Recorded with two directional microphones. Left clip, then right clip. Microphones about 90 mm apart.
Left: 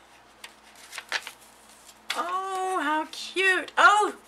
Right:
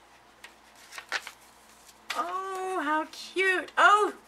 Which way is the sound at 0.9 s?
5° left (ahead or behind).